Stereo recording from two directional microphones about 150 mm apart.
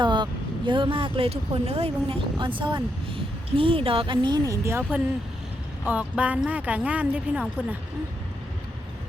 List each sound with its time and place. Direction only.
0.0 s speech: 30° right (ahead or behind)
4.8 s speech: 5° right (ahead or behind)